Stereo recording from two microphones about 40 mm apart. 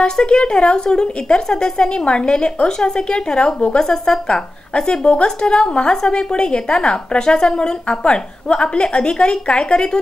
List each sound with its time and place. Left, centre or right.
0.0 s a woman's voice: centre